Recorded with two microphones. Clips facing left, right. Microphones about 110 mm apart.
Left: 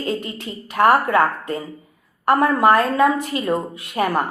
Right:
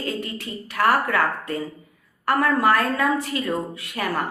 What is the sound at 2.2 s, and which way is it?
Speech, 20° left (ahead or behind).